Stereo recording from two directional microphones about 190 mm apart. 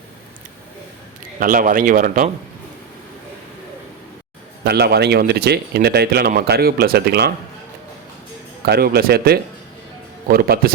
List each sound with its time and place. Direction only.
1.4 s speech: 45° right (ahead or behind)
4.6 s speech: 60° right (ahead or behind)
8.6 s speech: 55° right (ahead or behind)